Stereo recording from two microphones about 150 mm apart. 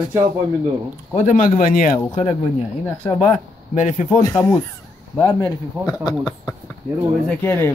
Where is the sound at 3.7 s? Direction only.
55° left (ahead or behind).